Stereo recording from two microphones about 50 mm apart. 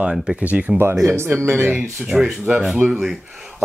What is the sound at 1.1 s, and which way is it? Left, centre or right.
Speech, right.